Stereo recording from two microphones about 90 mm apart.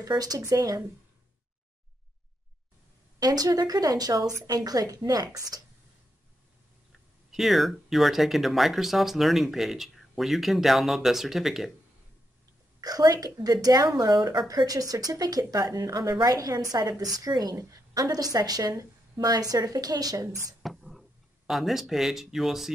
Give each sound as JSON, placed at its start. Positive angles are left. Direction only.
{"t": 0.1, "sound": "speech", "side_deg": -45}
{"t": 3.2, "sound": "a woman's voice", "side_deg": -45}
{"t": 7.2, "sound": "speech", "side_deg": 0}
{"t": 12.8, "sound": "a woman's voice", "side_deg": -45}
{"t": 20.6, "sound": "a sound", "side_deg": 0}
{"t": 21.5, "sound": "speech", "side_deg": 0}